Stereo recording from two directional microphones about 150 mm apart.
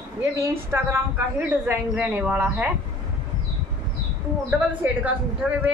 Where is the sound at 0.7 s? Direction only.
15° right (ahead or behind).